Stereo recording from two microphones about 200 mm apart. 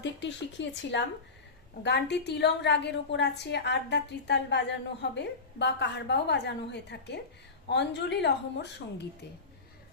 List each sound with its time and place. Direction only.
0.0 s a woman's voice: 60° left (ahead or behind)